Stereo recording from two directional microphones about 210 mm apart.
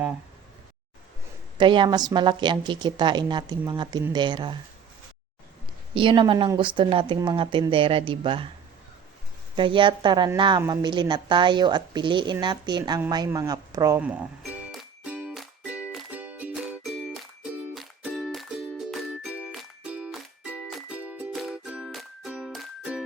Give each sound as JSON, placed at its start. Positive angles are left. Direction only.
{"t": 1.5, "sound": "speech", "side_deg": -25}
{"t": 5.9, "sound": "speech", "side_deg": -25}
{"t": 9.6, "sound": "speech", "side_deg": -25}
{"t": 13.0, "sound": "music", "side_deg": -20}